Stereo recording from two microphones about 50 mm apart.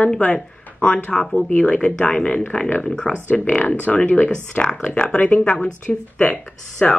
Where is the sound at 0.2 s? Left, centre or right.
Left.